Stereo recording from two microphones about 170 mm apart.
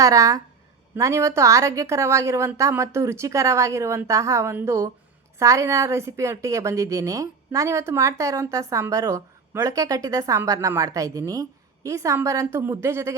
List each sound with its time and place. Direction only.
0.0 s a woman's voice: 20° right (ahead or behind)